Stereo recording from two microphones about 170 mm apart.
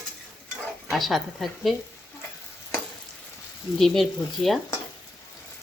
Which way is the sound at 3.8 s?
Centre (ahead or behind).